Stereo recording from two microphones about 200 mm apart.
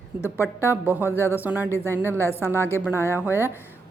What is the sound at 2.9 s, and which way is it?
Speech, 15° left (ahead or behind).